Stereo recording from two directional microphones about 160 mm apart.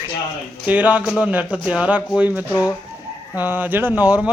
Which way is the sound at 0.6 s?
10° right (ahead or behind).